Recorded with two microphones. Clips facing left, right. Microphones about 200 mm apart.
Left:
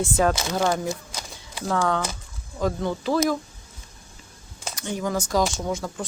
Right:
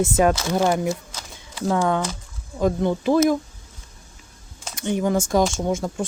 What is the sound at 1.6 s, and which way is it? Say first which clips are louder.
Speech: right 3 dB; 20° right (ahead or behind).